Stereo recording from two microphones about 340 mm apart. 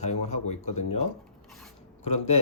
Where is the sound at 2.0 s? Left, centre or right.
Centre.